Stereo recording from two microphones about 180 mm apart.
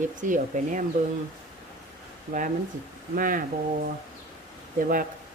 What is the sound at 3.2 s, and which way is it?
Speech, 50° right (ahead or behind).